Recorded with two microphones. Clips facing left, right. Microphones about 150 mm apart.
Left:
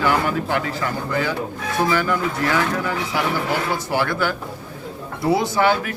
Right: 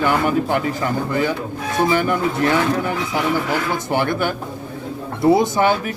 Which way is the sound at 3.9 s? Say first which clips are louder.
Right 2 dB; 20° right (ahead or behind).